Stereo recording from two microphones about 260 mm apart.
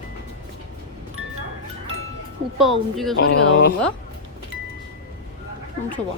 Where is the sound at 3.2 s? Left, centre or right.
Left.